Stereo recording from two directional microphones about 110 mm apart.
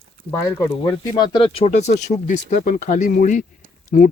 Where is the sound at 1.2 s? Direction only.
50° left (ahead or behind).